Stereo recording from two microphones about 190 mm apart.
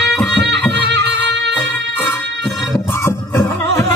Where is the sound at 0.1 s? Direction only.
Centre (ahead or behind).